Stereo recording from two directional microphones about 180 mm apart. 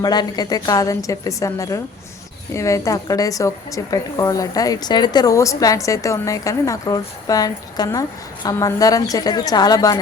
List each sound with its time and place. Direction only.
0.0 s a woman's voice: 20° left (ahead or behind)